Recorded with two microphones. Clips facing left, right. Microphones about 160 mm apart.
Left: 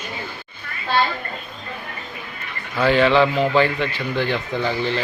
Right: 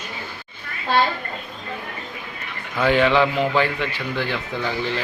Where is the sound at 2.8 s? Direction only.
15° right (ahead or behind).